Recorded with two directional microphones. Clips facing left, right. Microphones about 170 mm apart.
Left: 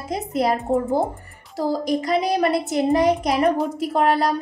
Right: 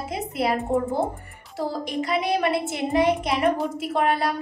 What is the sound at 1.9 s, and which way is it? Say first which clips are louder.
A woman's voice: left 2 dB; 40° left (ahead or behind).